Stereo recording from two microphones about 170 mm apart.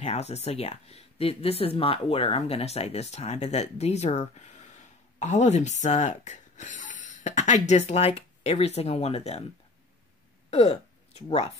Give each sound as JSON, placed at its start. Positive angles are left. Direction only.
{"t": 0.0, "sound": "speech", "side_deg": 40}
{"t": 10.5, "sound": "speech", "side_deg": 40}